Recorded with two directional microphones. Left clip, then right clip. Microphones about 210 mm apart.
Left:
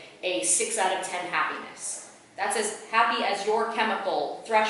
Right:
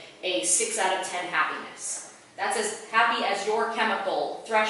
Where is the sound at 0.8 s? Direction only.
5° left (ahead or behind).